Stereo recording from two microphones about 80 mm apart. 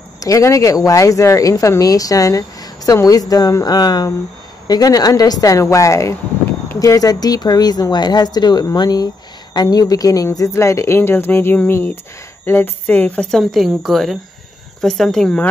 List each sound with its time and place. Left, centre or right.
0.2 s a woman's voice: left
10.2 s speech: left; by 13.4 s centre
13.4 s a woman's voice: centre